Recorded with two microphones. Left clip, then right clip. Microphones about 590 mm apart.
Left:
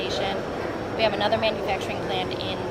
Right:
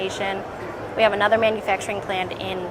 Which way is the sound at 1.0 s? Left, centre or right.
Right.